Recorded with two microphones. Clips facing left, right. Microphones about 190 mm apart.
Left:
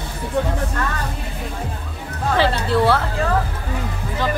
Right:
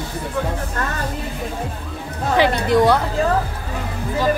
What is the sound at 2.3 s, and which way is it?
Speech, 15° right (ahead or behind).